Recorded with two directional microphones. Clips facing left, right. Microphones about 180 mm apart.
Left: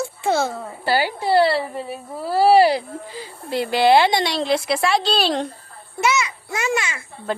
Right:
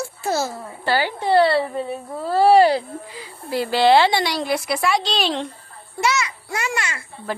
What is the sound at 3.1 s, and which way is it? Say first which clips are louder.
Speech: even; 30° left (ahead or behind).